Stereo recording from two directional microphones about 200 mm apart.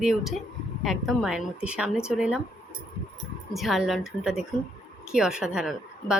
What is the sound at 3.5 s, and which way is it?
Speech, centre (ahead or behind).